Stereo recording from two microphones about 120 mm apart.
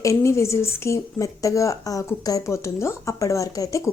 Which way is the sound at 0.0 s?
25° left (ahead or behind).